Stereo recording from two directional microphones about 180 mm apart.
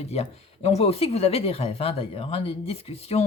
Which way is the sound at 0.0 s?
35° left (ahead or behind).